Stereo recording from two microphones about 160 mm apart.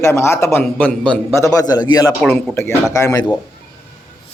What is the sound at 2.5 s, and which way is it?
Speech, 15° left (ahead or behind).